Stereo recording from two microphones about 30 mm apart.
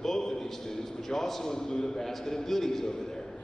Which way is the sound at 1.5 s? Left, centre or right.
Centre.